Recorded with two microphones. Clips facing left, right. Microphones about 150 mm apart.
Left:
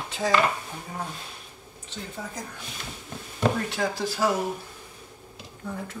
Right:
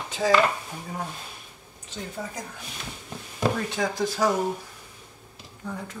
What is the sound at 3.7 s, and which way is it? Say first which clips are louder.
Speech: right 1 dB; 5° left (ahead or behind).